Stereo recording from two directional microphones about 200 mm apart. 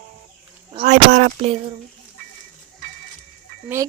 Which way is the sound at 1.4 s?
30° right (ahead or behind).